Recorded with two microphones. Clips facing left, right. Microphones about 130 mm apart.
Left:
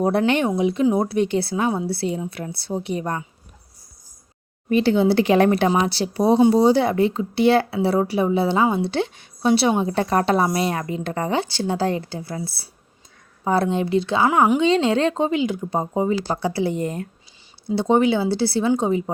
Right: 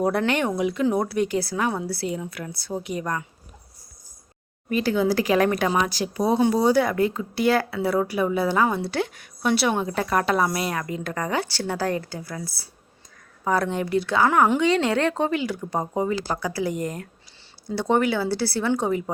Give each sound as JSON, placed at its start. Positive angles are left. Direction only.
{"t": 0.3, "sound": "speech", "side_deg": 20}
{"t": 4.7, "sound": "speech", "side_deg": 25}
{"t": 14.3, "sound": "speech", "side_deg": 10}